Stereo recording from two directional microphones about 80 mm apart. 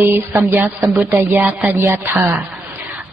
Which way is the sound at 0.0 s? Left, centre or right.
Right.